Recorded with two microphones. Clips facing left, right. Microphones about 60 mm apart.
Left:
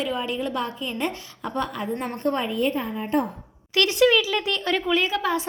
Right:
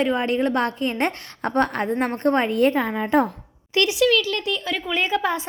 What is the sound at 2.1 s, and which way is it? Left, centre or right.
Speech, right.